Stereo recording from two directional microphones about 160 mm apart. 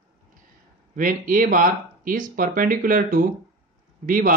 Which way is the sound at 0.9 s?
60° right (ahead or behind).